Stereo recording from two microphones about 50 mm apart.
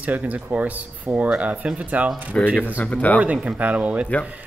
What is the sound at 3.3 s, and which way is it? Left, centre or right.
Speech, right.